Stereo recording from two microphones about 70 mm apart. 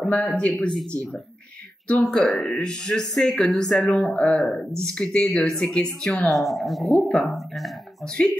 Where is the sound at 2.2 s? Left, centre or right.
Centre.